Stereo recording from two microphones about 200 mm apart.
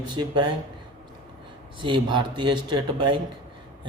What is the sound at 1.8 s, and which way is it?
A man's voice, 25° right (ahead or behind).